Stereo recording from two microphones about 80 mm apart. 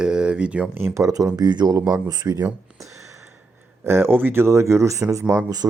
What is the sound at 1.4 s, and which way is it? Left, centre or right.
Speech, right.